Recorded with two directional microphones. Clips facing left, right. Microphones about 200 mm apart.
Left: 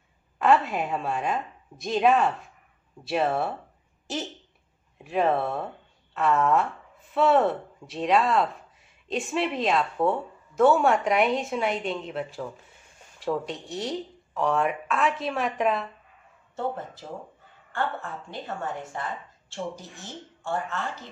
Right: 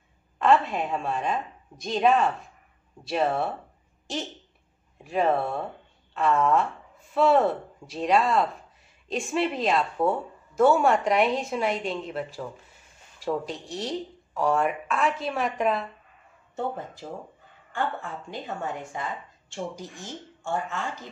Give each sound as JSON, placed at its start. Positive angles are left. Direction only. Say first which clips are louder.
{"t": 0.4, "sound": "speech", "louder": "even", "side_deg": 5}
{"t": 4.9, "sound": "speech", "louder": "even", "side_deg": 0}
{"t": 16.5, "sound": "speech", "louder": "even", "side_deg": -15}
{"t": 18.3, "sound": "speech", "louder": "even", "side_deg": -15}